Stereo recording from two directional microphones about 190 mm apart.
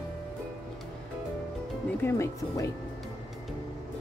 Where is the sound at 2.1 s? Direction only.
15° left (ahead or behind).